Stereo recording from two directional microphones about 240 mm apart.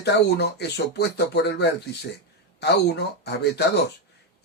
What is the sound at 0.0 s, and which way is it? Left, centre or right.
Speech, left.